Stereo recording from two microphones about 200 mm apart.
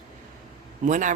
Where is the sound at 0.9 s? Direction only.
40° right (ahead or behind).